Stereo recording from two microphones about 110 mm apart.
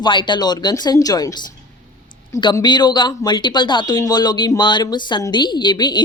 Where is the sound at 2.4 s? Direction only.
40° left (ahead or behind).